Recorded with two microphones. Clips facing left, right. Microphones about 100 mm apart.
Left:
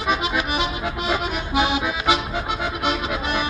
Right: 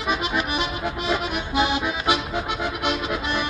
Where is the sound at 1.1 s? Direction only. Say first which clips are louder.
Left 2 dB; 20° left (ahead or behind).